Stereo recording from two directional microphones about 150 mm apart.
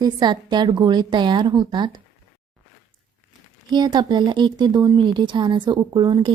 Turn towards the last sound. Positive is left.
turn(degrees=-30)  # may be behind; listen again after turning